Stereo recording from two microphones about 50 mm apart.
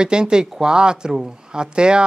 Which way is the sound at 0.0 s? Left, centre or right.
Centre.